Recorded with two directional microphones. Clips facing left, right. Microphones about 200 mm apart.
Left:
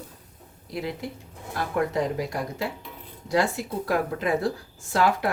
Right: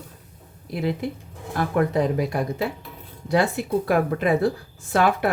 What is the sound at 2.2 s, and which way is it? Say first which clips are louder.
Speech: right 5 dB; 60° right (ahead or behind).